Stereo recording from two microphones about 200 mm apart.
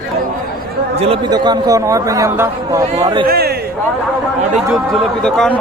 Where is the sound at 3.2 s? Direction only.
50° right (ahead or behind).